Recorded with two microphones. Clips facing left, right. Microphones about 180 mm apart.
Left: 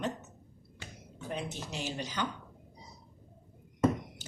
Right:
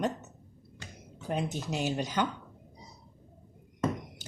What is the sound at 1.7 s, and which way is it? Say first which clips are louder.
Speech: right 7 dB; 50° right (ahead or behind).